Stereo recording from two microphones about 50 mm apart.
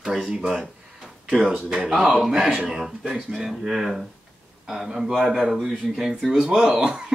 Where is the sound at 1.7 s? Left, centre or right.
Centre.